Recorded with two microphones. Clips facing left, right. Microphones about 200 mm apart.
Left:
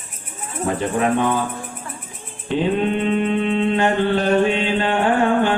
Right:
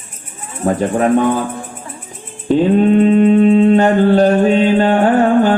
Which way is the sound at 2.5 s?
40° right (ahead or behind).